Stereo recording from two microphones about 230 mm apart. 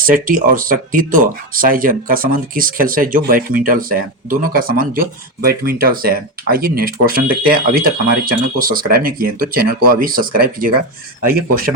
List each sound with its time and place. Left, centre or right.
0.0 s speech: right